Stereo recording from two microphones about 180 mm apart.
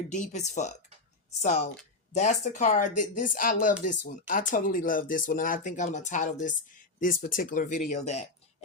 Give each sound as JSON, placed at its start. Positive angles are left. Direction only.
{"t": 0.1, "sound": "speech", "side_deg": 40}